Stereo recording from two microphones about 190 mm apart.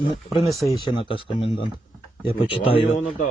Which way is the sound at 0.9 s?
25° left (ahead or behind).